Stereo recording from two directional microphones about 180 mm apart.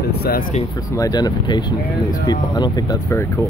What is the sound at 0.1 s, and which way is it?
Speech, 60° left (ahead or behind).